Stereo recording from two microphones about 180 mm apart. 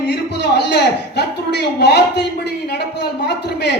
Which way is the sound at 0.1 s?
70° left (ahead or behind).